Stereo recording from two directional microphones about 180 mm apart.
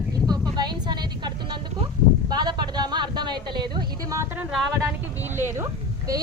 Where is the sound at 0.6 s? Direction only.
25° right (ahead or behind).